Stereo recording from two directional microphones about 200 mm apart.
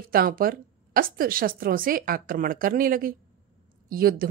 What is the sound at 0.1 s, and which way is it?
A woman's voice, 45° right (ahead or behind).